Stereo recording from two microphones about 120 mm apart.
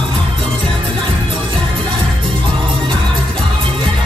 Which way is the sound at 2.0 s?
45° right (ahead or behind).